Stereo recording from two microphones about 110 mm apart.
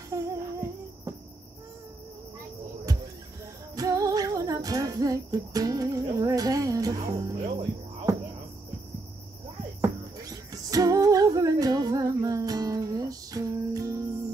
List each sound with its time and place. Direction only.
0.1 s a sound: 30° right (ahead or behind)
3.7 s music: 30° right (ahead or behind)
9.8 s music: 30° right (ahead or behind)